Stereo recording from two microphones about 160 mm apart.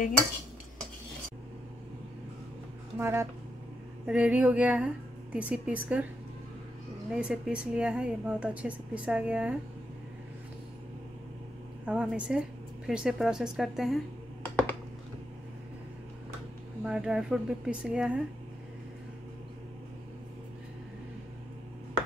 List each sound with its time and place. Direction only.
3.0 s speech: 15° right (ahead or behind)
7.1 s speech: 5° right (ahead or behind)
11.8 s speech: 5° right (ahead or behind)
14.4 s computer keyboard: 10° left (ahead or behind)
16.8 s speech: 5° right (ahead or behind)